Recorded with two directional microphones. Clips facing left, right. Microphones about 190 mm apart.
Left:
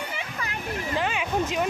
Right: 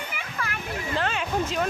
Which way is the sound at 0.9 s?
10° left (ahead or behind).